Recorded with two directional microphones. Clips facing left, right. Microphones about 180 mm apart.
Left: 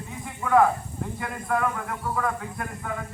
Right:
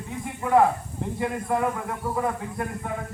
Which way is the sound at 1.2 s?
25° right (ahead or behind).